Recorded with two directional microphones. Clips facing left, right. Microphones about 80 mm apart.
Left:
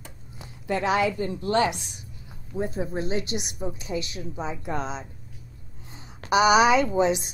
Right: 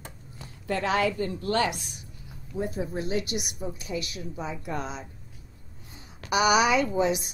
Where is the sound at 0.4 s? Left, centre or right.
Centre.